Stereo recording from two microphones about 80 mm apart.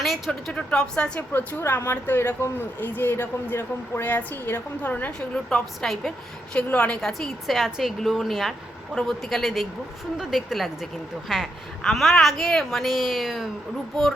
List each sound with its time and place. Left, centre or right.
0.3 s speech: centre
1.3 s speech: left
7.0 s a woman's voice: centre